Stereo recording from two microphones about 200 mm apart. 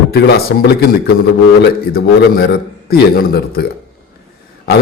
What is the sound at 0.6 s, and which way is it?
A man's voice, 55° left (ahead or behind).